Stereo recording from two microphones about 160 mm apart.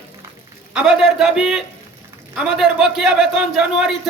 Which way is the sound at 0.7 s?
5° right (ahead or behind).